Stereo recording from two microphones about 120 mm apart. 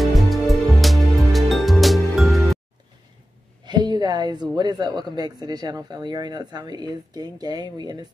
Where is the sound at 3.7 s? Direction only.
35° right (ahead or behind).